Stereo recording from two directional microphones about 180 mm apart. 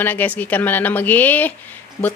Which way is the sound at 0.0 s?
10° left (ahead or behind).